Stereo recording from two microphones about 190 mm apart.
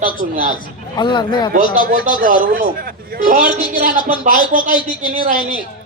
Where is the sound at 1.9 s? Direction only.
50° right (ahead or behind).